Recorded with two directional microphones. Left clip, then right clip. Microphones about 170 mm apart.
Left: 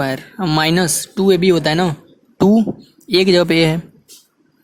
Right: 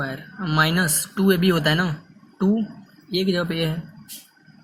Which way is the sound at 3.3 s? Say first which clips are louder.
Left 12 dB; 70° left (ahead or behind).